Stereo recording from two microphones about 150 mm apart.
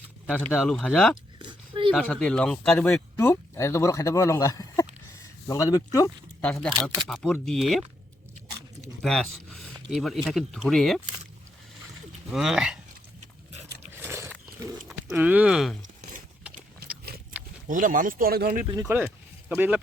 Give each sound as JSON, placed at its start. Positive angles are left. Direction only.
{"t": 0.3, "sound": "speech", "side_deg": 10}
{"t": 1.4, "sound": "a sound", "side_deg": -35}
{"t": 2.0, "sound": "speech", "side_deg": 5}
{"t": 6.4, "sound": "speech", "side_deg": 10}
{"t": 9.0, "sound": "speech", "side_deg": 5}
{"t": 12.3, "sound": "speech", "side_deg": 0}
{"t": 13.9, "sound": "biting", "side_deg": -15}
{"t": 14.8, "sound": "speech", "side_deg": -10}
{"t": 16.8, "sound": "a sound", "side_deg": -90}
{"t": 17.7, "sound": "speech", "side_deg": -65}
{"t": 18.7, "sound": "speech", "side_deg": -20}
{"t": 19.0, "sound": "a sound", "side_deg": -10}